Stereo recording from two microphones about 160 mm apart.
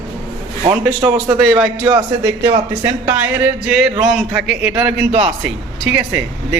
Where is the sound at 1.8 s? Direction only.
25° right (ahead or behind).